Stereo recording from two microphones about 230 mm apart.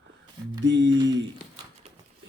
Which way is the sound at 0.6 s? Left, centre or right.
Right.